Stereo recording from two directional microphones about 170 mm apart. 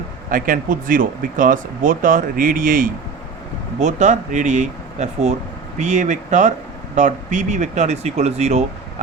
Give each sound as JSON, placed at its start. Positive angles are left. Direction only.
{"t": 0.3, "sound": "speech", "side_deg": -55}